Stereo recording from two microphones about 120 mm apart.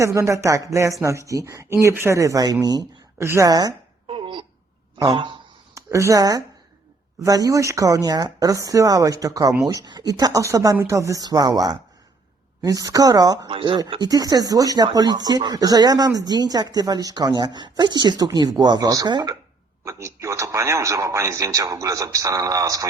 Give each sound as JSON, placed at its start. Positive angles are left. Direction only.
{"t": 0.0, "sound": "a man's voice", "side_deg": -25}
{"t": 4.0, "sound": "throat clearing", "side_deg": -45}
{"t": 4.9, "sound": "speech", "side_deg": -40}
{"t": 5.7, "sound": "a man's voice", "side_deg": -25}
{"t": 13.5, "sound": "speech", "side_deg": -45}
{"t": 19.8, "sound": "a man's voice", "side_deg": -25}